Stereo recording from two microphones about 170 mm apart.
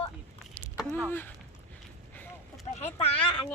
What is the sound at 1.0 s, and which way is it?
Speech, 10° left (ahead or behind).